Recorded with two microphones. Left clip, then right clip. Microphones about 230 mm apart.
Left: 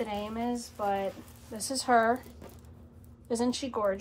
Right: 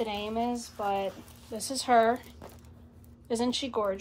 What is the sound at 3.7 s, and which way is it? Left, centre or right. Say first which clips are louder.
Speech: left 2 dB; right.